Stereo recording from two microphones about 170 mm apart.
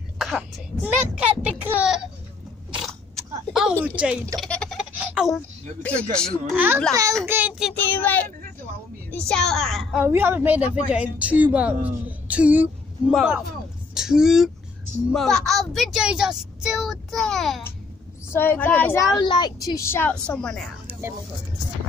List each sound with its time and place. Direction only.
0.2 s a woman's voice: 5° right (ahead or behind)
2.7 s biting: centre (ahead or behind)
3.8 s a woman's voice: 5° right (ahead or behind)
4.4 s a sound: 5° left (ahead or behind)
5.8 s a woman's voice: 10° left (ahead or behind)
6.5 s a woman's voice: 10° right (ahead or behind)
7.9 s a woman's voice: 10° left (ahead or behind)
9.3 s speech: 5° left (ahead or behind)
10.0 s a woman's voice: 15° right (ahead or behind)
18.3 s a woman's voice: 10° left (ahead or behind)
19.1 s a woman's voice: 25° left (ahead or behind); by 20.6 s 5° left (ahead or behind)